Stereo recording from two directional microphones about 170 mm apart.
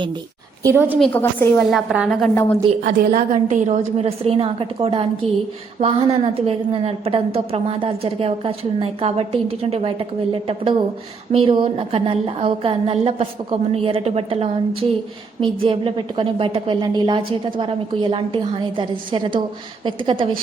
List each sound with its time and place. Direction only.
0.6 s a woman's voice: 15° right (ahead or behind)
0.9 s a woman's voice: 5° left (ahead or behind)
1.7 s a woman's voice: centre (ahead or behind)
2.3 s a woman's voice: 10° left (ahead or behind)
2.8 s a woman's voice: 55° right (ahead or behind); by 20.2 s 30° right (ahead or behind)